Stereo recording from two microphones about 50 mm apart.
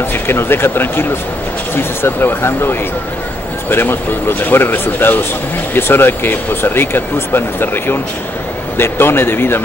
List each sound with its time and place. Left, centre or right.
0.3 s speech: left